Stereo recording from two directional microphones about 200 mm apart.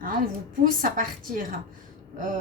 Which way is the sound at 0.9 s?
45° right (ahead or behind).